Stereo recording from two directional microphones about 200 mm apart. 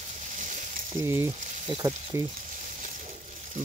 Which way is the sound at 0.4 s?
40° right (ahead or behind).